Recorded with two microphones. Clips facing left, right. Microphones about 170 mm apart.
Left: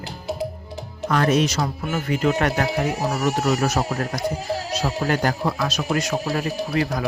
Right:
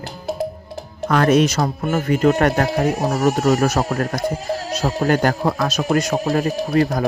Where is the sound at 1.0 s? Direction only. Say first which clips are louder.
Right 4 dB; 60° right (ahead or behind).